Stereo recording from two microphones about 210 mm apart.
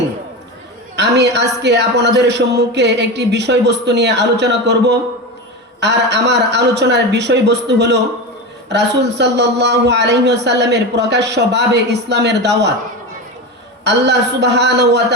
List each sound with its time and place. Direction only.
0.9 s a man's voice: 55° right (ahead or behind)
13.8 s a man's voice: 55° right (ahead or behind)